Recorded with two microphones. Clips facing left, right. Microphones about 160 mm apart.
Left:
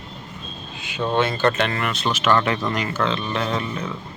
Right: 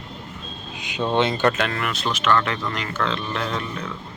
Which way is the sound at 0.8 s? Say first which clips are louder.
Even; 15° right (ahead or behind).